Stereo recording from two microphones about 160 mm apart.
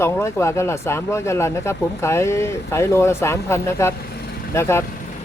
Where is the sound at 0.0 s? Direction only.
15° left (ahead or behind).